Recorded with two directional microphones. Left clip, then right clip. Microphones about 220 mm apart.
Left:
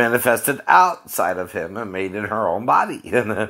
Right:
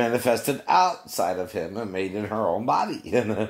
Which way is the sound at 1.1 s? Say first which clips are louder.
Left 4 dB; 20° left (ahead or behind).